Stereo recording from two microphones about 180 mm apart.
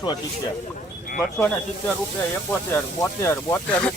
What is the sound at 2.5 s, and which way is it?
Speech, 10° left (ahead or behind).